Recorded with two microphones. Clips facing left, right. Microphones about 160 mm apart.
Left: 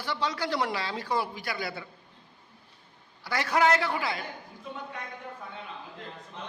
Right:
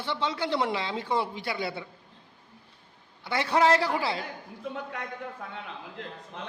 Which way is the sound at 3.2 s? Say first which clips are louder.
Right 1 dB; 25° right (ahead or behind).